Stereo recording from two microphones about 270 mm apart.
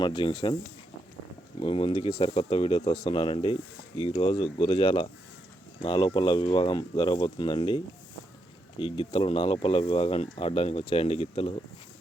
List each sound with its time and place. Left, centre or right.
0.0 s speech: centre
1.5 s speech: centre
8.8 s speech: centre